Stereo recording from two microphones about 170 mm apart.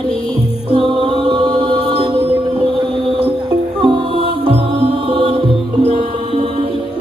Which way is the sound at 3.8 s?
30° right (ahead or behind).